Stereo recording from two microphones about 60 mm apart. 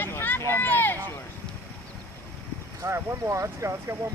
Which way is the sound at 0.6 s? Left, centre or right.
Left.